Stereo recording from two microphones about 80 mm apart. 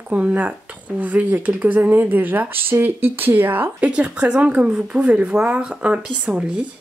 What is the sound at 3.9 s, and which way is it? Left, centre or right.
Speech, centre.